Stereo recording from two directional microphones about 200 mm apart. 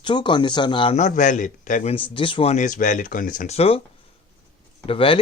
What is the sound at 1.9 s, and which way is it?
Speech, 25° left (ahead or behind).